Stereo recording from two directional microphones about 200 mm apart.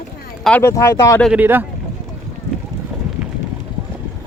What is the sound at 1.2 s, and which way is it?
Speech, 5° right (ahead or behind).